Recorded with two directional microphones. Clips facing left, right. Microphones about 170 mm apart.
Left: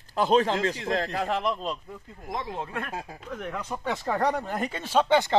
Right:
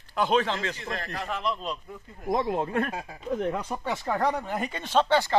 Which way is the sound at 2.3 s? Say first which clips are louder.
Right 7 dB; 40° right (ahead or behind).